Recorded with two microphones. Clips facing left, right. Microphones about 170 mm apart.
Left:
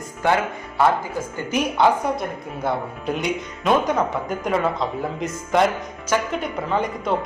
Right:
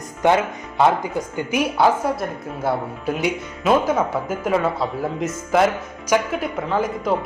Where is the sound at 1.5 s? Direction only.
10° right (ahead or behind).